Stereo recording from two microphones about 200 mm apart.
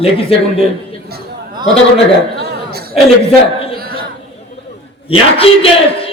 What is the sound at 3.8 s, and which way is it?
Chatter, 50° right (ahead or behind).